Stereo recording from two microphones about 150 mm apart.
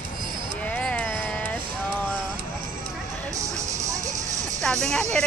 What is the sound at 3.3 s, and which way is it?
Music, 20° right (ahead or behind).